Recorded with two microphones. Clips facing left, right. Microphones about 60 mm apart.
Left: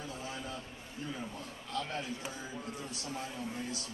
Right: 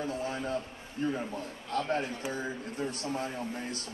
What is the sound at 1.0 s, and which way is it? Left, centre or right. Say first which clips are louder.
A man's voice: right 9 dB; right.